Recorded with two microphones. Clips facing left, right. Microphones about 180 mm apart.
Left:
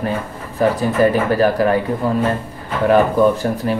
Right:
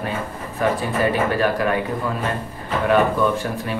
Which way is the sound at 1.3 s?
35° left (ahead or behind).